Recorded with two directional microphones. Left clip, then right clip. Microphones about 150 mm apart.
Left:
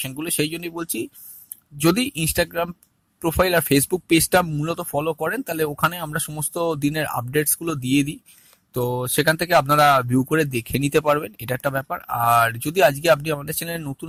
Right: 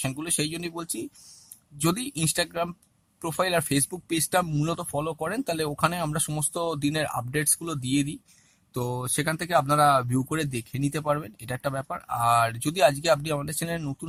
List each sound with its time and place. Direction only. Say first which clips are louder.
0.1 s speech: left 5 dB; 20° left (ahead or behind)
4.4 s speech: left 2 dB; 10° left (ahead or behind)
4.7 s speech: left 6 dB; 20° left (ahead or behind)
13.7 s speech: left 3 dB; 15° left (ahead or behind)